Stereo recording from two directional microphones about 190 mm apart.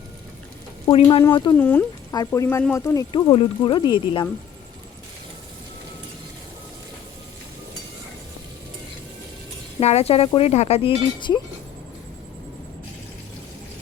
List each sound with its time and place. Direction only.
0.9 s speech: 25° left (ahead or behind)
1.5 s speech: 10° left (ahead or behind)
9.8 s speech: 35° left (ahead or behind)